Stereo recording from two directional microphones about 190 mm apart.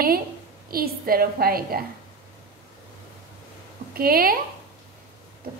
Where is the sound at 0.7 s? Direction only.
50° right (ahead or behind).